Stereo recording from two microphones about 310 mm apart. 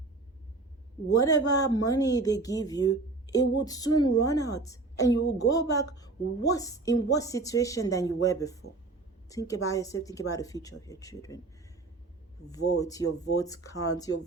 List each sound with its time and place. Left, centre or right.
1.1 s a woman's voice: centre
12.8 s a woman's voice: centre
13.3 s speech: left
13.7 s a woman's voice: centre